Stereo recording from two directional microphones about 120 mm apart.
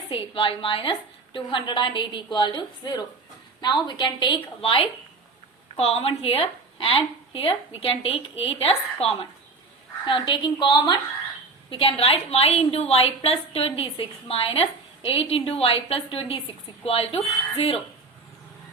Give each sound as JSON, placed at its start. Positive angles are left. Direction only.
{"t": 0.1, "sound": "a woman's voice", "side_deg": 45}
{"t": 10.1, "sound": "a woman's voice", "side_deg": 45}
{"t": 11.7, "sound": "a woman's voice", "side_deg": 50}